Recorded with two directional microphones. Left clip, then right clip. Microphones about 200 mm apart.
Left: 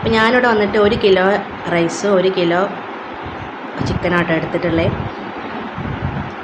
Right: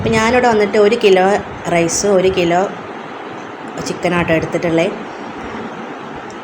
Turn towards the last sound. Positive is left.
turn(degrees=-15)  # may be behind; listen again after turning